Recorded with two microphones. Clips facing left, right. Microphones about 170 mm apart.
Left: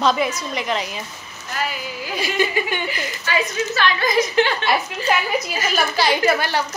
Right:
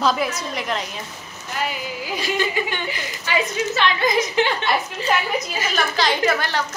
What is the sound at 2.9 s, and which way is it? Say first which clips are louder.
A woman's voice: left 1 dB; 20° right (ahead or behind).